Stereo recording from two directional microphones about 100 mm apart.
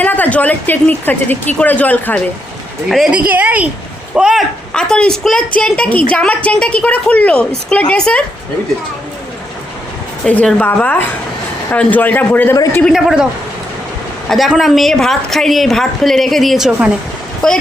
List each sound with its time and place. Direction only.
0.0 s a woman's voice: 15° left (ahead or behind)
3.1 s speech: 15° right (ahead or behind)
4.7 s a woman's voice: 5° left (ahead or behind)
10.2 s a woman's voice: 15° left (ahead or behind)
12.9 s a woman's voice: 5° right (ahead or behind)
14.3 s a woman's voice: centre (ahead or behind)